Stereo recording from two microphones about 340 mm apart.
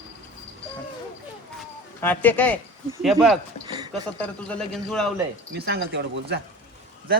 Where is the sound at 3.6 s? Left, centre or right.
Centre.